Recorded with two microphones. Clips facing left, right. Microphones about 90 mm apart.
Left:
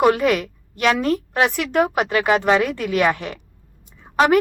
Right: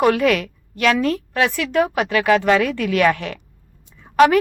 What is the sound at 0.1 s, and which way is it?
A woman's voice, 25° left (ahead or behind).